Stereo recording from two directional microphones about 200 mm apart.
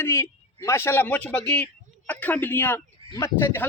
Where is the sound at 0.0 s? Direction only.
15° left (ahead or behind).